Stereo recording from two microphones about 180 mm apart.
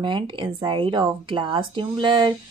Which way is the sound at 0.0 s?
25° right (ahead or behind).